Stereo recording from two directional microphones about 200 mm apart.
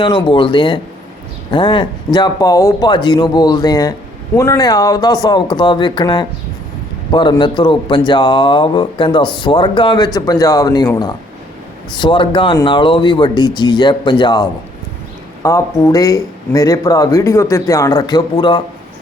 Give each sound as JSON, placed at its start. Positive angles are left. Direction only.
{"t": 0.0, "sound": "speech", "side_deg": 25}